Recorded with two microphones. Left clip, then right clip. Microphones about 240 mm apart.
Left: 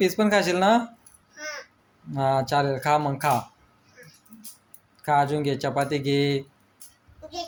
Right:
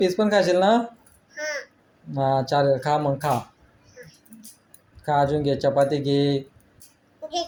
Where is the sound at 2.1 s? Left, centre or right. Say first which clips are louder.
Right 1 dB; left.